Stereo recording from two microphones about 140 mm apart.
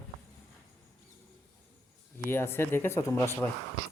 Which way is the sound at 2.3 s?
15° left (ahead or behind).